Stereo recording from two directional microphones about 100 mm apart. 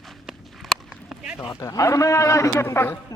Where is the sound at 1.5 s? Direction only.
35° left (ahead or behind).